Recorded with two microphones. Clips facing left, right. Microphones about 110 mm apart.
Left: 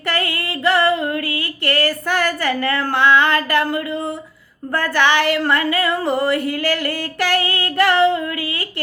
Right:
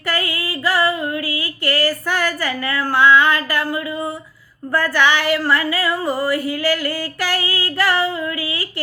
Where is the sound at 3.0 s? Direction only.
55° left (ahead or behind).